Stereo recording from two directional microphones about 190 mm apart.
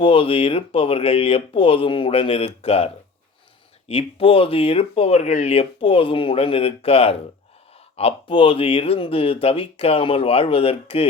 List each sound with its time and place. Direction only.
0.0 s speech: 30° left (ahead or behind)